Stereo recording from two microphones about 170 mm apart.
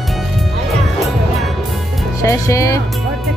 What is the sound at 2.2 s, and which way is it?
Speech, 20° left (ahead or behind).